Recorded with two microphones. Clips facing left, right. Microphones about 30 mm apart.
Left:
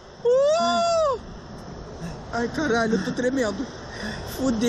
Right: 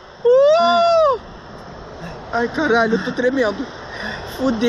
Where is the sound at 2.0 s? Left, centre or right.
Right.